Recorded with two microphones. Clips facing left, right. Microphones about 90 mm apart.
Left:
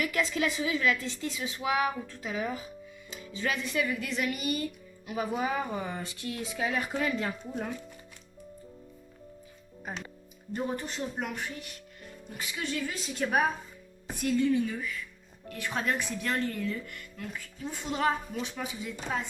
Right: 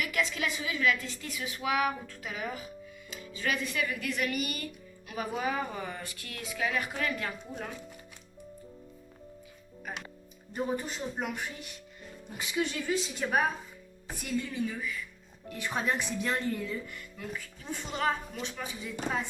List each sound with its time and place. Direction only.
0.0 s speech: 35° left (ahead or behind)
10.5 s a woman's voice: 5° right (ahead or behind)
13.0 s a woman's voice: centre (ahead or behind)
15.4 s speech: 15° right (ahead or behind)
16.8 s a woman's voice: 5° right (ahead or behind)